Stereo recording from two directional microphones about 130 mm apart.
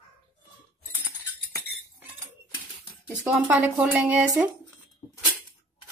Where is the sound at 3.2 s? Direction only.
10° right (ahead or behind).